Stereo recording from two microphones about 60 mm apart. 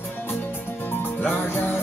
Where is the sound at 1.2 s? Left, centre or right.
Left.